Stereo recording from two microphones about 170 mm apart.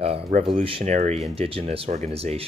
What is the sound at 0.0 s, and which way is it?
Speech, 35° right (ahead or behind).